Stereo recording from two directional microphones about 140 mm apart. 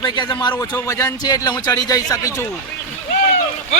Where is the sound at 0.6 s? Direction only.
20° left (ahead or behind).